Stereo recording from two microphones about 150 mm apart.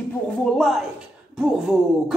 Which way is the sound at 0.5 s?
Centre (ahead or behind).